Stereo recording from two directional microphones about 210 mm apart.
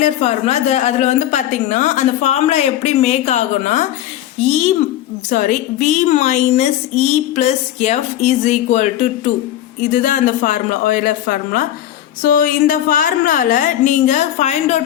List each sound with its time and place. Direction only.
0.0 s a woman's voice: 30° left (ahead or behind)
5.3 s a woman's voice: 35° left (ahead or behind)